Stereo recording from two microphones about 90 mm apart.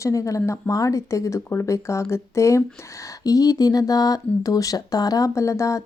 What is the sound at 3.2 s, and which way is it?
Speech, 45° left (ahead or behind).